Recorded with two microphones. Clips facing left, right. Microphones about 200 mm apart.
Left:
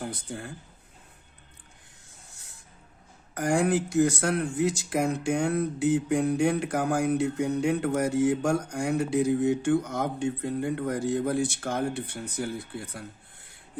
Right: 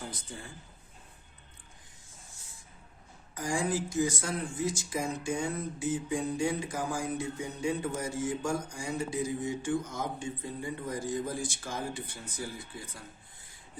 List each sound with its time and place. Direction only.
0.0 s speech: 60° left (ahead or behind)
2.3 s spray: 70° left (ahead or behind)
3.3 s speech: 65° left (ahead or behind)